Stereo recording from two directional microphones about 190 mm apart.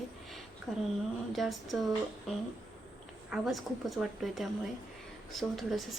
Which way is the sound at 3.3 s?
Centre (ahead or behind).